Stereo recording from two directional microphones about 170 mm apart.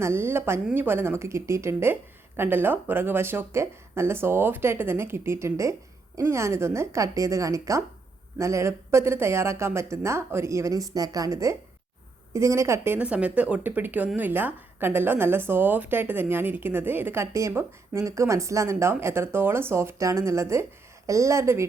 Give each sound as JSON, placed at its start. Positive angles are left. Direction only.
{"t": 0.0, "sound": "speech", "side_deg": -15}